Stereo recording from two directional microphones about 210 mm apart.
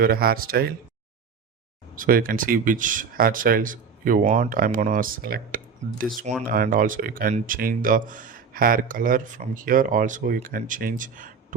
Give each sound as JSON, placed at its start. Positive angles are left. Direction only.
{"t": 0.0, "sound": "speech", "side_deg": -45}
{"t": 2.0, "sound": "speech", "side_deg": -40}